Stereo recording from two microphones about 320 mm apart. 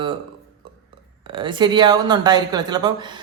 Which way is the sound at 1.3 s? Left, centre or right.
Centre.